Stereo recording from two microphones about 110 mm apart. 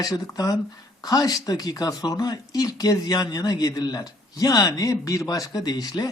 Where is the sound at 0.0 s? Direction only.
35° left (ahead or behind).